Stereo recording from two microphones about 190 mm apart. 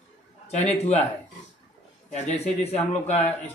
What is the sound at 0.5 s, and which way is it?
Speech, 35° left (ahead or behind).